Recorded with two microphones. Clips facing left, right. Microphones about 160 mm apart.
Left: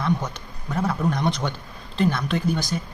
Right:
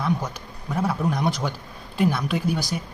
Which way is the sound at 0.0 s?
5° right (ahead or behind).